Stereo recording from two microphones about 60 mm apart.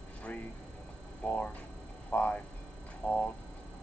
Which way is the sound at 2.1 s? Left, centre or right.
Left.